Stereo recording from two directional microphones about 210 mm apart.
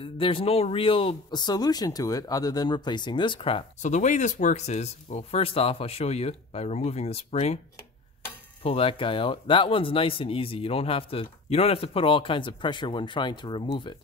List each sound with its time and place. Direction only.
0.0 s speech: 25° left (ahead or behind)
8.6 s speech: 25° left (ahead or behind)